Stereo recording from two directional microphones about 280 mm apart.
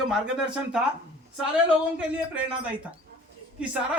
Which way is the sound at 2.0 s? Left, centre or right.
Centre.